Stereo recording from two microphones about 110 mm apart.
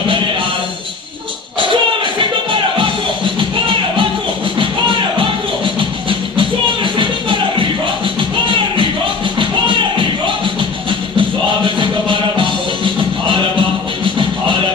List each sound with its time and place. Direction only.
1.6 s music: 50° right (ahead or behind)
6.0 s music: 50° right (ahead or behind)